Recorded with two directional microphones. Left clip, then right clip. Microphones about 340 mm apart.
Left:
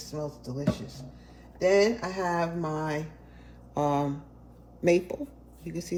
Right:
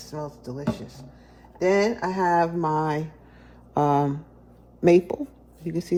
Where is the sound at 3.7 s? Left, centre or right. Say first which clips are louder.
Right 6 dB; right.